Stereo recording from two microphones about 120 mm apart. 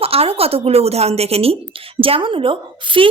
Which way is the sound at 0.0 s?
55° right (ahead or behind).